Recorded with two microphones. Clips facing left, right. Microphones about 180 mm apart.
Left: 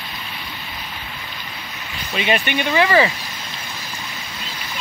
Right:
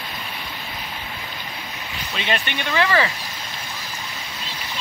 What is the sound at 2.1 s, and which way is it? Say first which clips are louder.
Speech: left 6 dB; 10° left (ahead or behind).